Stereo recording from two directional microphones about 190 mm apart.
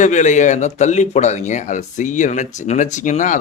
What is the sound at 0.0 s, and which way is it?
A man's voice, 40° left (ahead or behind).